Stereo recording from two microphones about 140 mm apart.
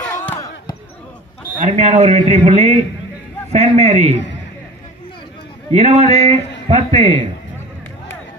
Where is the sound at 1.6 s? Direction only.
55° right (ahead or behind).